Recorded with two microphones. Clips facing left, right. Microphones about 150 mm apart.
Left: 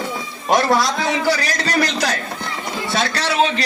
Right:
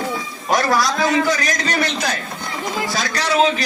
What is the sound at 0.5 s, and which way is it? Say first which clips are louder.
A man's voice: left 1 dB; 25° left (ahead or behind).